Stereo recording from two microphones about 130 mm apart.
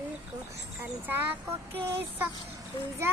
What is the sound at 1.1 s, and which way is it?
Child singing, 15° right (ahead or behind).